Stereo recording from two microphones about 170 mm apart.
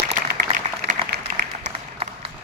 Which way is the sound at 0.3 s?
60° right (ahead or behind).